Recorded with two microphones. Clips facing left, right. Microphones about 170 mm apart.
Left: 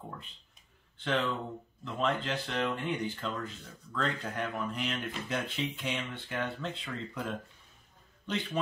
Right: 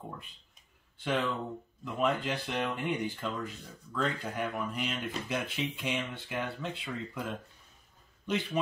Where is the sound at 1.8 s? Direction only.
10° right (ahead or behind).